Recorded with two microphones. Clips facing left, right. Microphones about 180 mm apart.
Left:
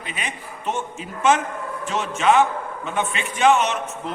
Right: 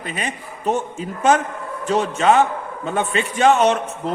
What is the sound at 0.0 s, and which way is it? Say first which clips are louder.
A man's voice: right 5 dB; 45° right (ahead or behind).